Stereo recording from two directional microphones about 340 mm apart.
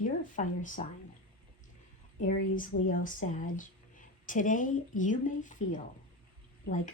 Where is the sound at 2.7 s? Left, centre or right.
Left.